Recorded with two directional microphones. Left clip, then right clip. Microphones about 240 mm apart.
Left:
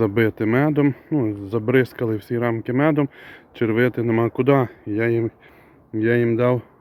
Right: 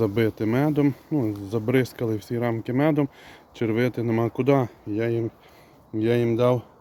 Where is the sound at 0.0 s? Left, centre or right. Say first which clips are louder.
Left 4 dB; centre.